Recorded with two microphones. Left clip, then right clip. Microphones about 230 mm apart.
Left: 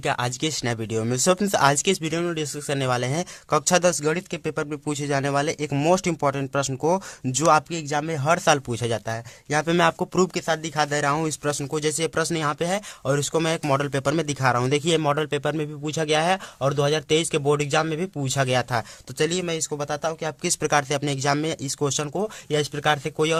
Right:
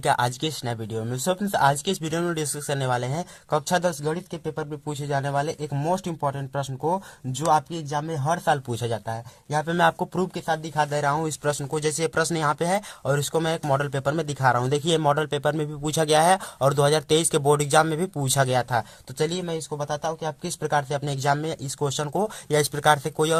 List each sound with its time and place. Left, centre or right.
0.0 s speech: centre; by 7.6 s left
7.7 s speech: left
8.7 s speech: centre